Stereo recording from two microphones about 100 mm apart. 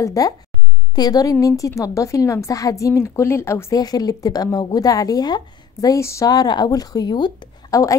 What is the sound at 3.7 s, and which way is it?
Speech, 40° left (ahead or behind).